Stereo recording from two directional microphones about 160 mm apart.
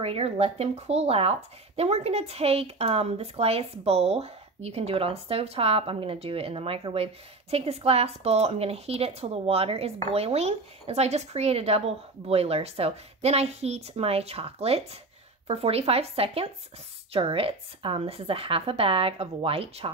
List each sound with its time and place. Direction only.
0.0 s speech: 40° right (ahead or behind)